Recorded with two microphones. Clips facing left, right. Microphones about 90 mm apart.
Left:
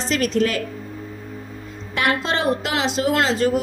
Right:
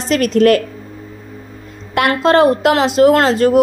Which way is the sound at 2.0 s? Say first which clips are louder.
Right 10 dB; 55° right (ahead or behind).